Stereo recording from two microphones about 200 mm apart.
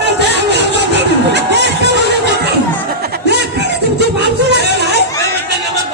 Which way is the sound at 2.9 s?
50° right (ahead or behind).